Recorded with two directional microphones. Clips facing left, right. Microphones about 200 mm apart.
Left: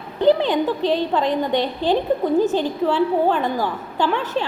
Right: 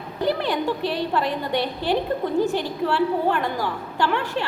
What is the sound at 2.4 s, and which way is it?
A woman's voice, 20° left (ahead or behind).